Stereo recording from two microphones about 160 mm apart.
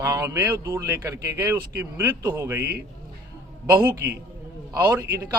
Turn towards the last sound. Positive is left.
turn(degrees=-20)  # may be behind; listen again after turning